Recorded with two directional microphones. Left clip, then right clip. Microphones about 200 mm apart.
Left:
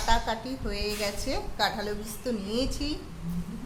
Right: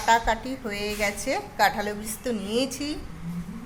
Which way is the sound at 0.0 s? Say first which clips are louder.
Right 6 dB; 20° right (ahead or behind).